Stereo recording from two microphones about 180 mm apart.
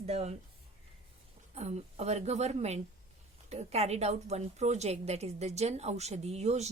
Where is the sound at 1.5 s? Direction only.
40° right (ahead or behind).